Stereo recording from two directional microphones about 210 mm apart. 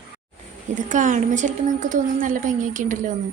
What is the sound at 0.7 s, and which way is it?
A woman's voice, 35° right (ahead or behind).